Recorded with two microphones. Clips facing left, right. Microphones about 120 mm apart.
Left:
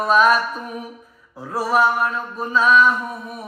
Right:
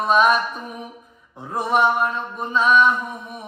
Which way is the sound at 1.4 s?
20° right (ahead or behind).